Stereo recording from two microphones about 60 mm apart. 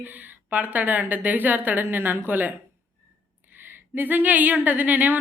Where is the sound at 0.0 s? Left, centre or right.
Right.